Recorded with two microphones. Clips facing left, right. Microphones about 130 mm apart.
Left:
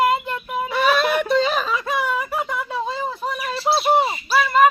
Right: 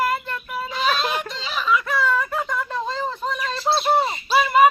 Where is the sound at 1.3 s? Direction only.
50° left (ahead or behind).